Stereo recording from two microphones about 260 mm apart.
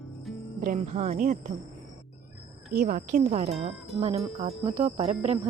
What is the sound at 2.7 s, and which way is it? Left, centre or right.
Speech, right.